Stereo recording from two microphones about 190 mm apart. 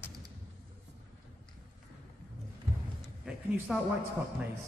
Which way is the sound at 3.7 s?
5° right (ahead or behind).